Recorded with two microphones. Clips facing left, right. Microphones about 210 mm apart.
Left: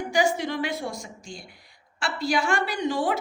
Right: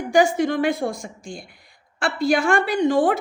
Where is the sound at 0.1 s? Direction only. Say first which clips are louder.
Right 7 dB; 50° right (ahead or behind).